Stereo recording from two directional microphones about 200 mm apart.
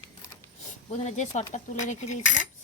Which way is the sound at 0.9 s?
35° left (ahead or behind).